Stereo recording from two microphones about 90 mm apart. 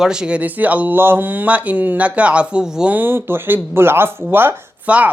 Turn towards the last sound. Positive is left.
turn(degrees=-20)  # may be behind; listen again after turning